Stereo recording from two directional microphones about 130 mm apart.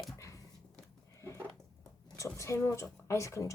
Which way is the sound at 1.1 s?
20° left (ahead or behind).